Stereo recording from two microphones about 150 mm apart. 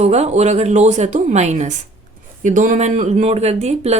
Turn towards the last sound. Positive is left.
turn(degrees=-45)  # may be behind; listen again after turning